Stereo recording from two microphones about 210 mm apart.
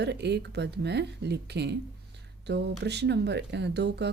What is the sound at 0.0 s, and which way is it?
A woman's voice, 55° right (ahead or behind).